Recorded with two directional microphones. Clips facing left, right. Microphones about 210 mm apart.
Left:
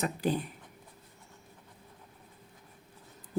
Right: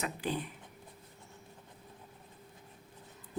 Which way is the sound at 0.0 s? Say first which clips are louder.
Left 5 dB; 40° left (ahead or behind).